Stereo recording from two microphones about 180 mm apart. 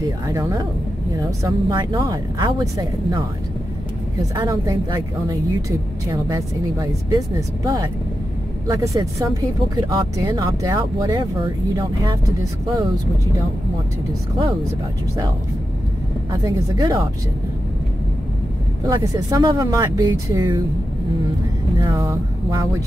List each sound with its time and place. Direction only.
0.3 s speech: 20° right (ahead or behind)
4.4 s speech: 20° right (ahead or behind)
16.3 s speech: 20° right (ahead or behind)
18.9 s speech: 25° right (ahead or behind)
21.7 s speech: 20° right (ahead or behind)